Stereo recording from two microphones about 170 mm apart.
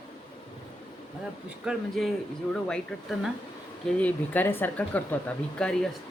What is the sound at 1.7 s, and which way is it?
Speech, 5° right (ahead or behind).